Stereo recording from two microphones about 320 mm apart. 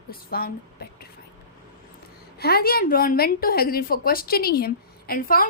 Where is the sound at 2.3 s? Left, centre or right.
Left.